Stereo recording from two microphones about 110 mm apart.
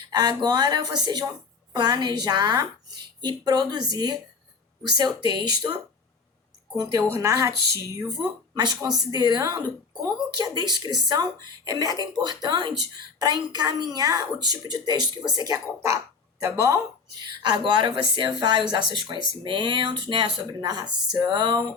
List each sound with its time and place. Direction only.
0.1 s speech: 40° right (ahead or behind)
6.9 s speech: 25° right (ahead or behind)
8.5 s speech: 40° right (ahead or behind)
17.2 s a woman's voice: 45° right (ahead or behind)